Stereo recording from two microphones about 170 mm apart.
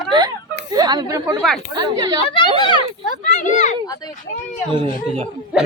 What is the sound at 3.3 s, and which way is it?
Speech, 45° left (ahead or behind).